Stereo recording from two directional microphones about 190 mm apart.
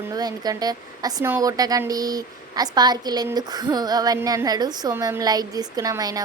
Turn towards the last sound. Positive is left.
turn(degrees=-20)  # may be behind; listen again after turning